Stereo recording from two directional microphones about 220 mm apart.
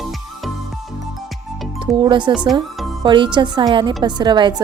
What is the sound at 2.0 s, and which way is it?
Speech, 20° right (ahead or behind).